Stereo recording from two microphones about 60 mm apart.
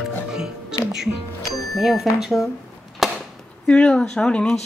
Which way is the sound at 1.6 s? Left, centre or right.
Centre.